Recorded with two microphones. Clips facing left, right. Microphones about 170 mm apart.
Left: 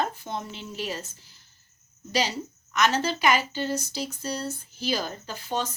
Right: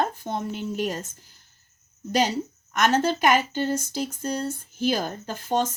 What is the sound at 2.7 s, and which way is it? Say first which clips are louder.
A woman's voice: right 3 dB; 45° right (ahead or behind).